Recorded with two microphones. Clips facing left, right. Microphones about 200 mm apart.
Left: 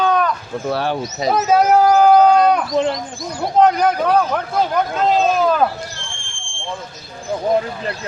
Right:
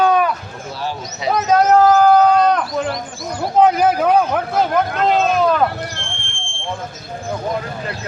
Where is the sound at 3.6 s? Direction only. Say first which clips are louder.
Right 1 dB; 5° right (ahead or behind).